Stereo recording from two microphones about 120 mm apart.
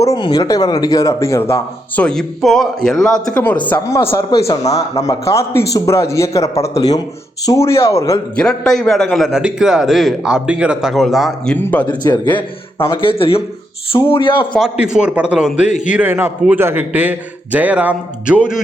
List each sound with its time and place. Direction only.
0.2 s a man's voice: 35° left (ahead or behind)
2.0 s a man's voice: 5° left (ahead or behind)
3.8 s a man's voice: 20° left (ahead or behind)
4.3 s a man's voice: 55° left (ahead or behind)
4.9 s a man's voice: 25° left (ahead or behind)
8.4 s a man's voice: 5° left (ahead or behind)
11.5 s speech: 15° left (ahead or behind)
11.9 s a man's voice: 35° left (ahead or behind)
14.6 s a man's voice: 5° right (ahead or behind)